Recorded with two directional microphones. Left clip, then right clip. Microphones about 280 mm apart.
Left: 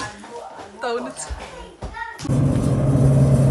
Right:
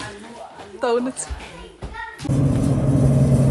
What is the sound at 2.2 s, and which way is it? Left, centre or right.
Vehicle, centre.